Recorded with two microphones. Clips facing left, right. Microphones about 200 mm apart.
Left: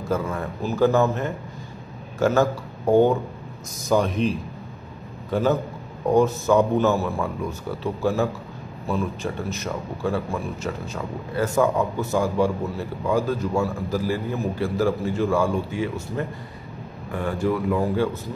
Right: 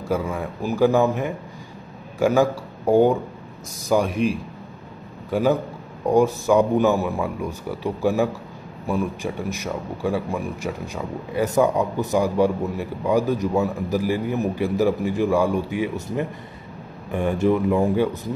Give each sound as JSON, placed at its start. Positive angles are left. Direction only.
{"t": 0.1, "sound": "a man's voice", "side_deg": -10}